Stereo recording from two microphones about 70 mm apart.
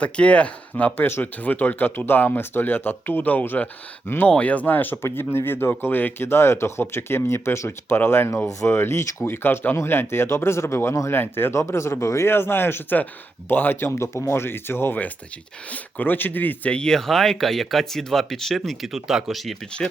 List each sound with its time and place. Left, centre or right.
0.0 s speech: centre
4.3 s speech: left
5.0 s speech: left
16.7 s speech: centre